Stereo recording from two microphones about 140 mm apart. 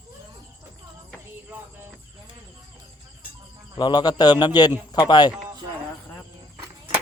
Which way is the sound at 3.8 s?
30° left (ahead or behind).